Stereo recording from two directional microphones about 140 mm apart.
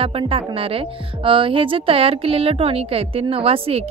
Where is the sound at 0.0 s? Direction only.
40° right (ahead or behind).